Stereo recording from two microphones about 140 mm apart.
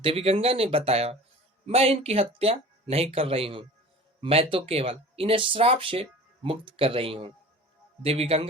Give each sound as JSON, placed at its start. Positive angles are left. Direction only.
{"t": 0.0, "sound": "speech", "side_deg": -45}